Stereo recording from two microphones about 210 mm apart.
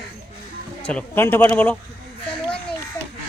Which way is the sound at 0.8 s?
10° left (ahead or behind).